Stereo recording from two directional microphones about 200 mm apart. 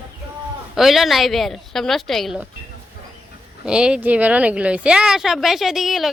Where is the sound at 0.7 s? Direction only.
Centre (ahead or behind).